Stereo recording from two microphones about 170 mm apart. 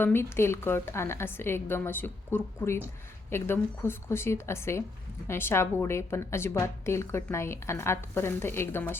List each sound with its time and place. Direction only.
0.0 s a woman's voice: 15° left (ahead or behind)